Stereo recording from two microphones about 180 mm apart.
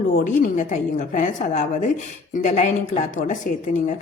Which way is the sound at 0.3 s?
45° left (ahead or behind).